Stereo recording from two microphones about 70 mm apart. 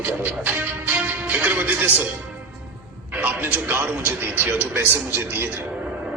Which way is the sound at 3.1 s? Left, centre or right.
Right.